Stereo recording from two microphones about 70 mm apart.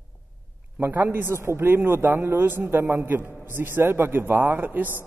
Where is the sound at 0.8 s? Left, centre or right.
Right.